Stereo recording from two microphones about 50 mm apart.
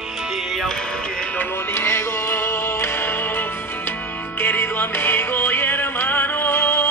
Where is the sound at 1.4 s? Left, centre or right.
Left.